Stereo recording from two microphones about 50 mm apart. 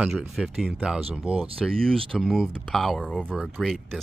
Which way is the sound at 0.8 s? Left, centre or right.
Centre.